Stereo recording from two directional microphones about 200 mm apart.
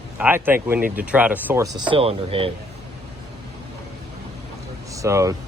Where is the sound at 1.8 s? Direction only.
25° right (ahead or behind).